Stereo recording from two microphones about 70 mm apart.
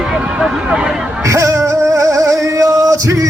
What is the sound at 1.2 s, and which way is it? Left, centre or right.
Music, right.